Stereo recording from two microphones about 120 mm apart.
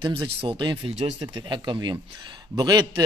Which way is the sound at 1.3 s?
40° right (ahead or behind).